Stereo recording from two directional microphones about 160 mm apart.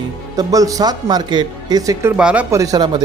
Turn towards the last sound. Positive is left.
turn(degrees=-25)  # may be behind; listen again after turning